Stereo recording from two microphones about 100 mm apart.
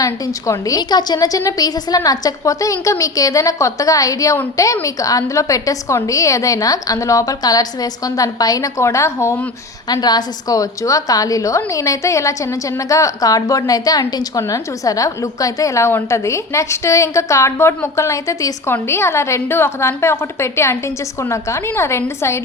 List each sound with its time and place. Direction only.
0.0 s a woman's voice: 35° left (ahead or behind)
9.9 s a woman's voice: 45° left (ahead or behind); by 22.4 s 25° left (ahead or behind)